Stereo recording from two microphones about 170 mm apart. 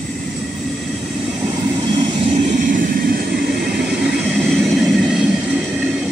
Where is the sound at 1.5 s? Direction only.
25° right (ahead or behind); by 3.4 s 60° right (ahead or behind).